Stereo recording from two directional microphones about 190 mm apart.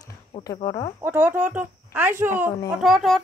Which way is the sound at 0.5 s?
25° left (ahead or behind).